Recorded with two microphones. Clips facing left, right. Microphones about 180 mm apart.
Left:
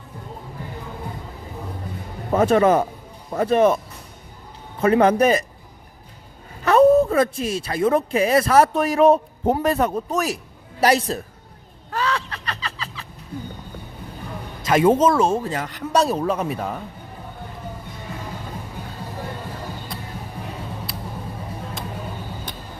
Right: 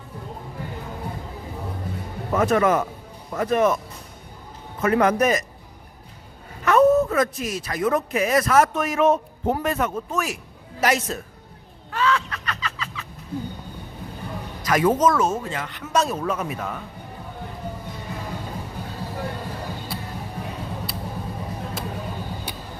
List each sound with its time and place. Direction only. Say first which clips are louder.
2.3 s speech: left 3 dB; 30° left (ahead or behind)
4.8 s speech: left 3 dB; 30° left (ahead or behind)
6.7 s a man's voice: left 3 dB; 30° left (ahead or behind)
11.9 s a sound: right 2 dB; 35° left (ahead or behind)
14.6 s speech: left 3 dB; 25° left (ahead or behind)